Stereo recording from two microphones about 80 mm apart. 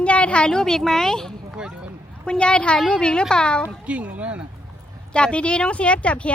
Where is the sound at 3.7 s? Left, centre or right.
Centre.